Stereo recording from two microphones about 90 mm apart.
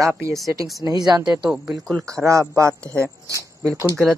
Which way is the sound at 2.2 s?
35° right (ahead or behind).